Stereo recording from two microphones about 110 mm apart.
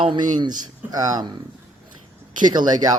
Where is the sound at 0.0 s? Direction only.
45° right (ahead or behind).